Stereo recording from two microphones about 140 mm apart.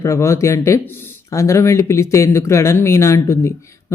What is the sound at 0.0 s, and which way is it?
Speech, 20° left (ahead or behind).